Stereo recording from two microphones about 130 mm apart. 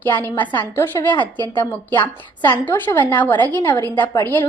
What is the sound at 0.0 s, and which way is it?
A woman's voice, 15° left (ahead or behind).